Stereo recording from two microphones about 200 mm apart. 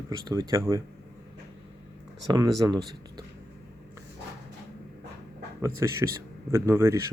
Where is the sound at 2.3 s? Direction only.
20° right (ahead or behind).